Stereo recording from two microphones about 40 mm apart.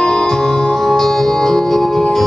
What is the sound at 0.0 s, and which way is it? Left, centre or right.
Music, centre.